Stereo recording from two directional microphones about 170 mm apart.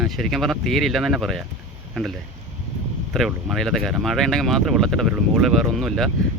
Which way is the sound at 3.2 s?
Centre (ahead or behind).